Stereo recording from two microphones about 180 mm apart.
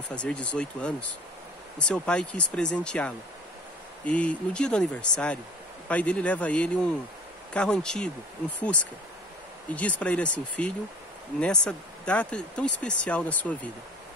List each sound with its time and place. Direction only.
0.1 s speech: 5° left (ahead or behind)